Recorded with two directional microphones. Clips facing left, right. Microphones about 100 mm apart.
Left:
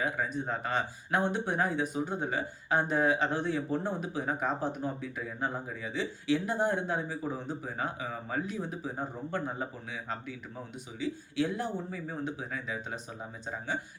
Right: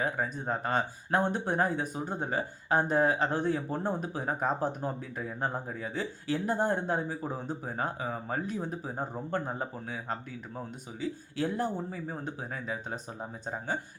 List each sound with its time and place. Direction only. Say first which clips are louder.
0.0 s speech: even; 35° right (ahead or behind)